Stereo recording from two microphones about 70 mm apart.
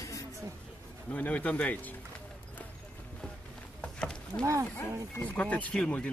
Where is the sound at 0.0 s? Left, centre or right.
Left.